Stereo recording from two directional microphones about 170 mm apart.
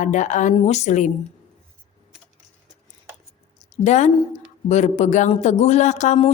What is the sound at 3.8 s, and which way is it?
Speech, 45° left (ahead or behind).